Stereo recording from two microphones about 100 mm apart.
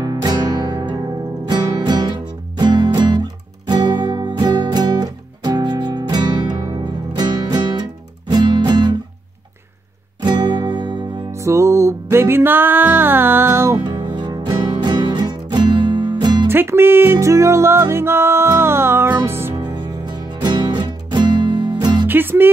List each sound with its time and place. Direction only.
0.0 s music: 45° right (ahead or behind)
10.2 s music: 50° right (ahead or behind)
11.3 s music: 30° right (ahead or behind)
13.7 s music: 50° right (ahead or behind)
16.4 s music: 25° right (ahead or behind)
19.6 s music: 45° right (ahead or behind)
22.0 s music: 20° right (ahead or behind)